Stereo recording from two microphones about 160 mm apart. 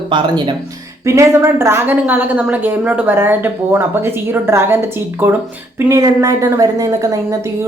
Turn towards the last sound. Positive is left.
turn(degrees=-20)  # may be behind; listen again after turning